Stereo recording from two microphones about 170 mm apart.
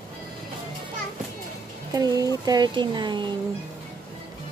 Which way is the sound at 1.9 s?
20° right (ahead or behind).